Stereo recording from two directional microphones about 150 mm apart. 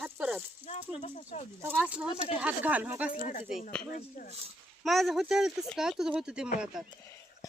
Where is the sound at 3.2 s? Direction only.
50° left (ahead or behind).